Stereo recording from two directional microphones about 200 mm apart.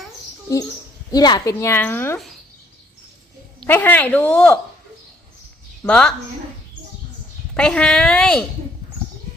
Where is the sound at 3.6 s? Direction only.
10° left (ahead or behind).